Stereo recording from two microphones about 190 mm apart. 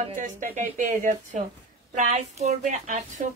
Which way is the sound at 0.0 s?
40° right (ahead or behind).